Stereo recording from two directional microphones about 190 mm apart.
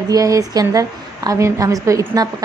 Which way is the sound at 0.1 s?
20° right (ahead or behind).